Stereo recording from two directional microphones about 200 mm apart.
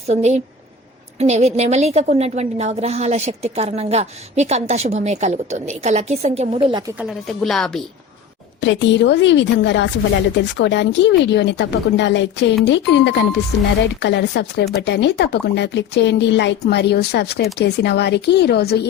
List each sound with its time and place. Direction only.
0.1 s a woman's voice: 35° right (ahead or behind)
7.0 s speech: centre (ahead or behind)
8.6 s speech: 65° left (ahead or behind)